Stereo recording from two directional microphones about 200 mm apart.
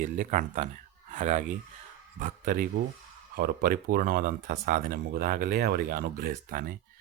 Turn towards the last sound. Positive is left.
turn(degrees=-45)  # may be behind; listen again after turning